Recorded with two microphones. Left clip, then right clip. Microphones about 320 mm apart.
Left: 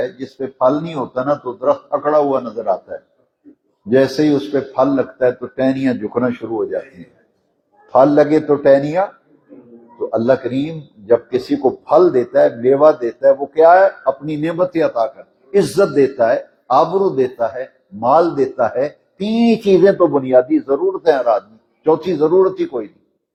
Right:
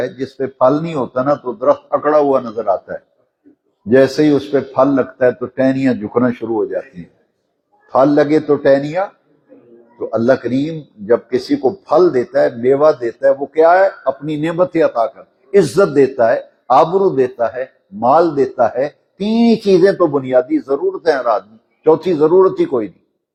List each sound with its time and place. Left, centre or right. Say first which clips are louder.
0.0 s a man's voice: right 2 dB; right
3.8 s a man's voice: right 3 dB; right
7.9 s a man's voice: left 1 dB; right
10.1 s a man's voice: right 1 dB; right